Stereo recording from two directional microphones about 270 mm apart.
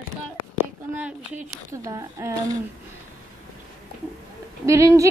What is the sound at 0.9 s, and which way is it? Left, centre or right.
A woman's voice, centre.